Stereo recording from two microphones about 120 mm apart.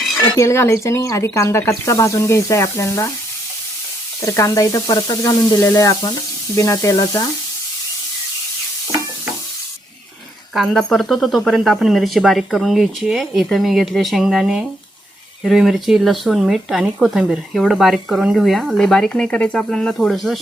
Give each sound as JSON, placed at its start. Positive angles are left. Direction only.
{"t": 0.3, "sound": "speech", "side_deg": 25}
{"t": 4.2, "sound": "speech", "side_deg": 25}
{"t": 10.5, "sound": "speech", "side_deg": 0}